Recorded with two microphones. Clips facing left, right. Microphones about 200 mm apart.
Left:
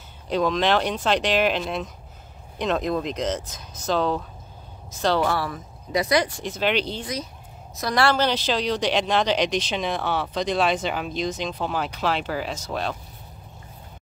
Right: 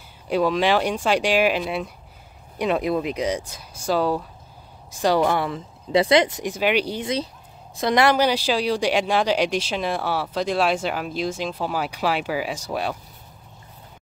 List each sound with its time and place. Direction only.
0.3 s speech: 10° right (ahead or behind)
7.0 s speech: 25° right (ahead or behind)